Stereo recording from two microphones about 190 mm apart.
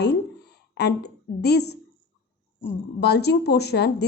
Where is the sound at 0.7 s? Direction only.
60° left (ahead or behind).